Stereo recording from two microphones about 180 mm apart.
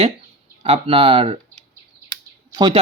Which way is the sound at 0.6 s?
30° right (ahead or behind).